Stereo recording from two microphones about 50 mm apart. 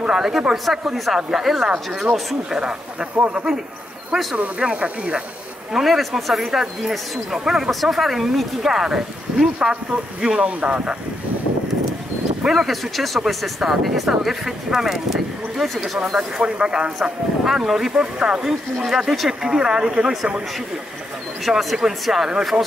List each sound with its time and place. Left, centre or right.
0.0 s speech: centre
5.7 s speech: centre; by 11.0 s right
12.4 s speech: centre
16.2 s speech: centre
21.5 s speech: centre